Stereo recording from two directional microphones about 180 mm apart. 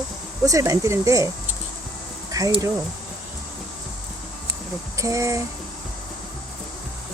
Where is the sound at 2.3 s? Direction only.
20° right (ahead or behind).